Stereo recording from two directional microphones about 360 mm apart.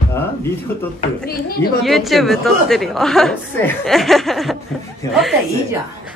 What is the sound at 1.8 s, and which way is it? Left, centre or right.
A woman's voice, centre.